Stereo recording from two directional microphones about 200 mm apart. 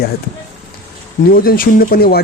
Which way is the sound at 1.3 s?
45° left (ahead or behind).